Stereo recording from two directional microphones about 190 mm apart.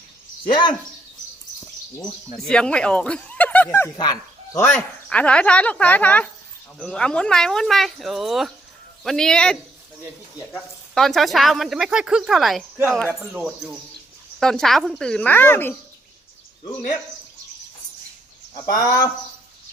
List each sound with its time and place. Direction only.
2.5 s speech: 5° left (ahead or behind)
3.9 s speech: 20° left (ahead or behind)
18.5 s speech: 20° left (ahead or behind)